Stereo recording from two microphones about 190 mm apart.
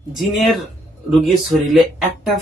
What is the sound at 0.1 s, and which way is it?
Speech, centre (ahead or behind).